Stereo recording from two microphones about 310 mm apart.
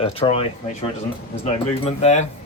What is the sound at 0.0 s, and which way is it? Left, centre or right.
Speech, centre.